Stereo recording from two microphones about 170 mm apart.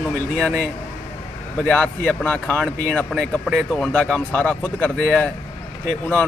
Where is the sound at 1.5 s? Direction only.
5° left (ahead or behind).